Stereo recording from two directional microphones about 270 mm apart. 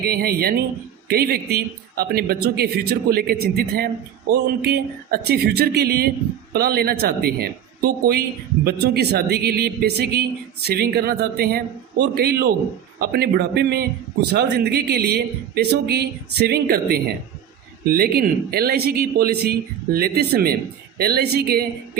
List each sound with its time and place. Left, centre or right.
0.0 s a man's voice: right